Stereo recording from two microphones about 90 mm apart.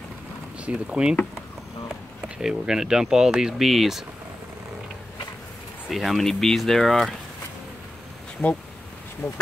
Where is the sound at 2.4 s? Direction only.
5° right (ahead or behind).